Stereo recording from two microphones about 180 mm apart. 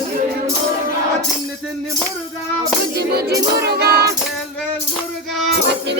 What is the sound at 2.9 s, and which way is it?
Music, 65° right (ahead or behind).